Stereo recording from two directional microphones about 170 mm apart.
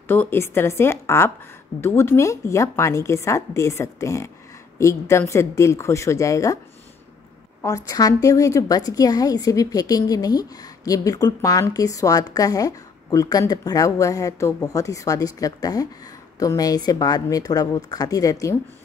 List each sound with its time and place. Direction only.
0.1 s a woman's voice: 15° left (ahead or behind)
7.6 s a woman's voice: 20° left (ahead or behind)